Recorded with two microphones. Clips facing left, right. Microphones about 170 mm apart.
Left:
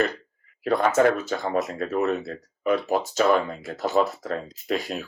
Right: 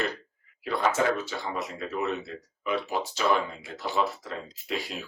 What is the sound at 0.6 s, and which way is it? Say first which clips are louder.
Speech: left 6 dB; 45° left (ahead or behind).